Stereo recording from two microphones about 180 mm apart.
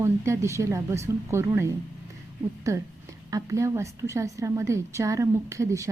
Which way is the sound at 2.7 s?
15° right (ahead or behind).